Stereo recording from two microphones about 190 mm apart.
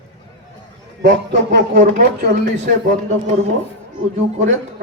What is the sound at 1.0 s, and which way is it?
Speech, 65° right (ahead or behind).